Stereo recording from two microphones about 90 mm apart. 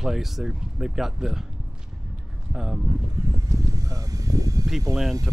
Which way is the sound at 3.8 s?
40° right (ahead or behind).